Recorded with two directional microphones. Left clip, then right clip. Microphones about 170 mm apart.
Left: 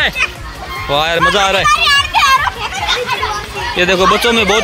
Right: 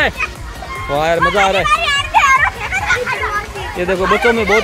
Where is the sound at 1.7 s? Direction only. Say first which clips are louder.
Left 4 dB; 80° right.